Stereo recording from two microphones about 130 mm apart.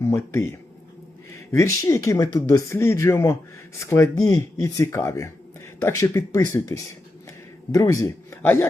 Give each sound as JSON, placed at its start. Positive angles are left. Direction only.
{"t": 0.0, "sound": "speech", "side_deg": 20}